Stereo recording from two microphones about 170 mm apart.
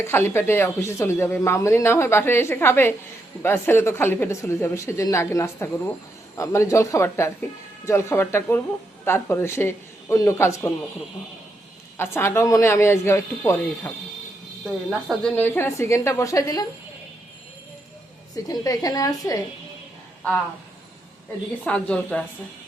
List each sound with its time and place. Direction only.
0.0 s speech: 15° left (ahead or behind)
11.9 s speech: 15° left (ahead or behind)
14.6 s speech: centre (ahead or behind); by 16.6 s 20° left (ahead or behind)
18.4 s a woman's voice: 20° left (ahead or behind)
21.6 s speech: 5° left (ahead or behind)